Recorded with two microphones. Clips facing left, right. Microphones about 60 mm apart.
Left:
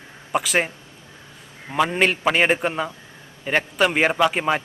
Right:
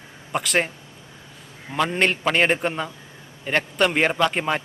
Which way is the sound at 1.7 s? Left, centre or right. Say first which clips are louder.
Left 2 dB; centre.